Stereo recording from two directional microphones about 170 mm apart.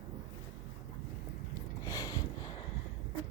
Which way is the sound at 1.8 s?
20° left (ahead or behind).